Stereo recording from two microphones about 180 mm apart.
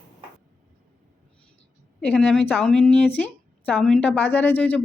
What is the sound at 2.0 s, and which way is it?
A woman's voice, 5° left (ahead or behind).